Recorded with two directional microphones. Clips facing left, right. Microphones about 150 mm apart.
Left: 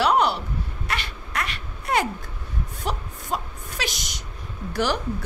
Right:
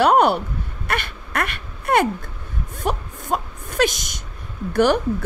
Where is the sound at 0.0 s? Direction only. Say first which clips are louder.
Right 5 dB; 50° right (ahead or behind).